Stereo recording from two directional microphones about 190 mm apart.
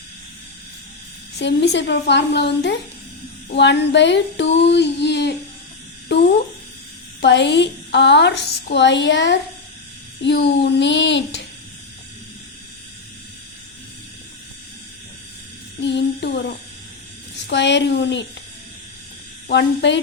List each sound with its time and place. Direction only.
1.4 s a woman's voice: 65° left (ahead or behind)
7.2 s a woman's voice: 65° left (ahead or behind)
15.8 s a sound: 65° left (ahead or behind)
17.4 s a woman's voice: 70° left (ahead or behind)
19.5 s a woman's voice: 65° left (ahead or behind)